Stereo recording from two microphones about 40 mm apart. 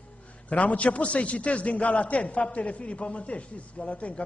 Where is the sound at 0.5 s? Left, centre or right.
Left.